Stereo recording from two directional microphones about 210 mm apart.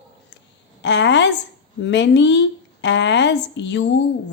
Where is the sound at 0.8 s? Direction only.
55° left (ahead or behind).